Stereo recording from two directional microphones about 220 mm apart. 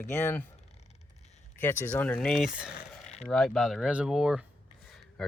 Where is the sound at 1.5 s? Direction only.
10° left (ahead or behind).